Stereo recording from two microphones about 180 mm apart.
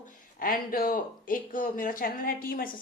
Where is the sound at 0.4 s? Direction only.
55° left (ahead or behind).